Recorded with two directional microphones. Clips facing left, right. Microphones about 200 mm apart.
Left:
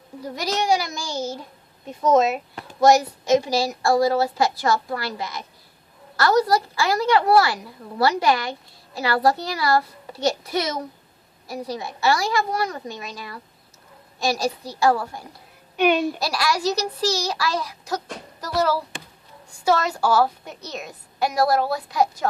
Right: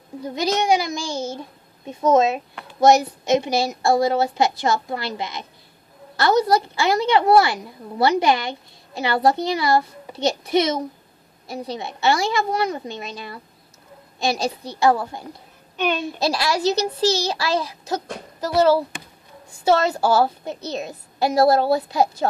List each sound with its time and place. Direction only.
0.2 s a woman's voice: 20° right (ahead or behind)
14.8 s a woman's voice: 20° right (ahead or behind)
15.7 s a child's voice: 10° left (ahead or behind)
16.2 s a woman's voice: 25° right (ahead or behind)